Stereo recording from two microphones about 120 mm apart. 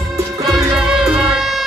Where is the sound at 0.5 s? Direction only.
5° right (ahead or behind).